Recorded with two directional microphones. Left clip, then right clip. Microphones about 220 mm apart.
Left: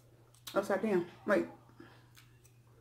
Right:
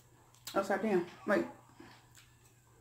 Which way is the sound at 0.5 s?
5° left (ahead or behind).